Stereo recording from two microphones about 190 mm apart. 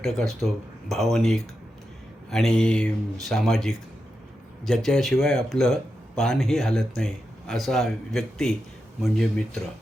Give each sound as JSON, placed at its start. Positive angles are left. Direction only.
{"t": 0.0, "sound": "speech", "side_deg": 0}